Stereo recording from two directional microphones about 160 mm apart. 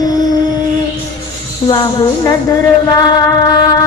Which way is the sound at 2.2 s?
20° left (ahead or behind).